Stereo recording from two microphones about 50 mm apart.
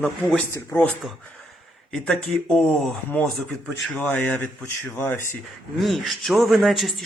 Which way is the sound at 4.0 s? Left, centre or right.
Left.